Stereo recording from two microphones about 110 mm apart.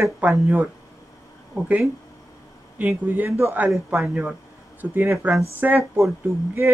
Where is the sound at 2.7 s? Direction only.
15° right (ahead or behind).